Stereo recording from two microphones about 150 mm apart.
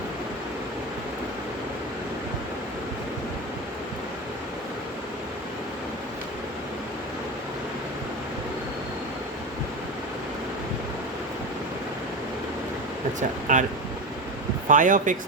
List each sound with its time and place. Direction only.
13.1 s speech: 55° right (ahead or behind)
14.7 s speech: 60° right (ahead or behind)